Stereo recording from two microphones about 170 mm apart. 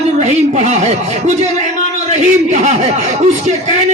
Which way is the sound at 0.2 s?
40° right (ahead or behind).